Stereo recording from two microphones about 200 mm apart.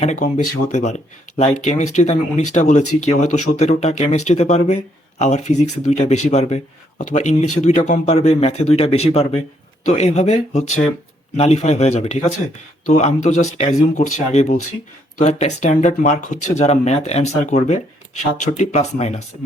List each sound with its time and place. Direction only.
0.0 s speech: 35° left (ahead or behind)